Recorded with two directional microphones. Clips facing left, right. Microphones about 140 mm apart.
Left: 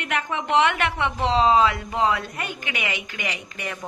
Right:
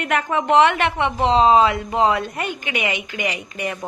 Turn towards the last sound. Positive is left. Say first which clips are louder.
# right 6 dB
turn(degrees=-20)  # may be behind; listen again after turning